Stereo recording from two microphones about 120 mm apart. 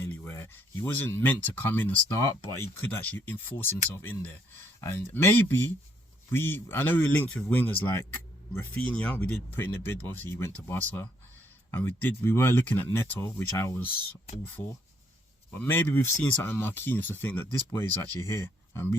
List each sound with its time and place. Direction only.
0.0 s speech: 15° left (ahead or behind)
11.7 s speech: 15° left (ahead or behind)
15.6 s speech: 15° left (ahead or behind)